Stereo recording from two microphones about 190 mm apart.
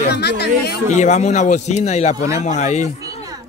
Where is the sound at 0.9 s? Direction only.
40° left (ahead or behind).